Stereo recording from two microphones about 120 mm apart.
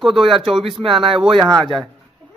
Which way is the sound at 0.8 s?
50° right (ahead or behind).